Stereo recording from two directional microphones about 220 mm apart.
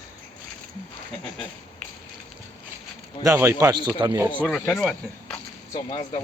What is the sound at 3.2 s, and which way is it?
Speech, 15° right (ahead or behind).